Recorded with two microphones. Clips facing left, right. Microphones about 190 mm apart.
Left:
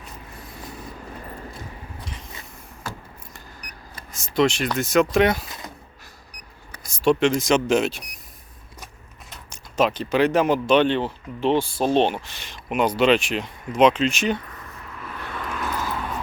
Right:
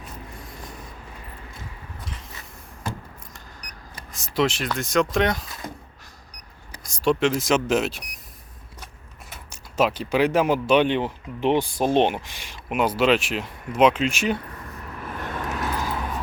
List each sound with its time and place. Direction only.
4.1 s speech: centre (ahead or behind)
6.8 s speech: centre (ahead or behind)
9.3 s speech: 5° right (ahead or behind)
15.1 s vehicle: 45° right (ahead or behind)